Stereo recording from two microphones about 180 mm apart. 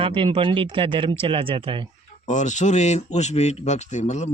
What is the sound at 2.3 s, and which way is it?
Speech, 40° left (ahead or behind).